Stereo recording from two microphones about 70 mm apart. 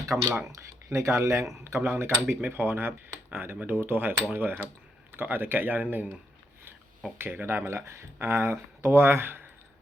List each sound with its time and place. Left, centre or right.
0.1 s speech: right
7.2 s speech: right